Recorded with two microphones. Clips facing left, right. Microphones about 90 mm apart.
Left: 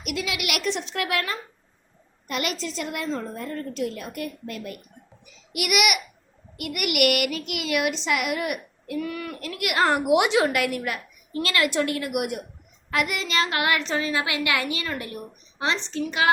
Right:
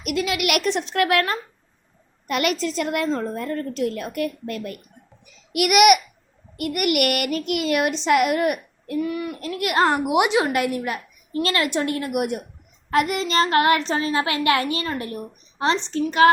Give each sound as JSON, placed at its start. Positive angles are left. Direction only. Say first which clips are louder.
{"t": 0.0, "sound": "a woman's voice", "louder": "right 6 dB", "side_deg": -50}
{"t": 9.0, "sound": "a woman's voice", "louder": "right 5 dB", "side_deg": -20}
{"t": 9.4, "sound": "a woman's voice", "louder": "right 3 dB", "side_deg": -30}